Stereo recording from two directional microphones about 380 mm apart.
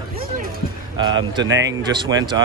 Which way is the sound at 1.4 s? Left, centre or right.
Right.